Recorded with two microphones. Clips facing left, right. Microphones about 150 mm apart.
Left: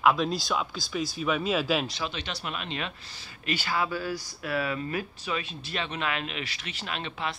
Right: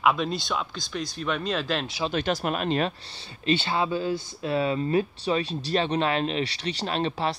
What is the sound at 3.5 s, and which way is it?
Speech, 25° right (ahead or behind).